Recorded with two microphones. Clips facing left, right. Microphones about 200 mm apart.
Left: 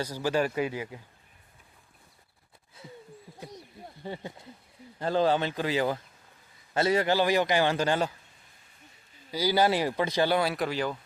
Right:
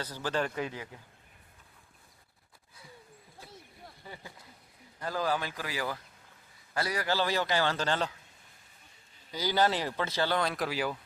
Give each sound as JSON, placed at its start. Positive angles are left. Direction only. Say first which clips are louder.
{"t": 0.0, "sound": "a man's voice", "louder": "left 5 dB", "side_deg": 10}
{"t": 4.0, "sound": "a man's voice", "louder": "left 11 dB", "side_deg": 25}
{"t": 9.3, "sound": "a man's voice", "louder": "left 4 dB", "side_deg": 10}
{"t": 10.7, "sound": "speech", "louder": "left 2 dB", "side_deg": -5}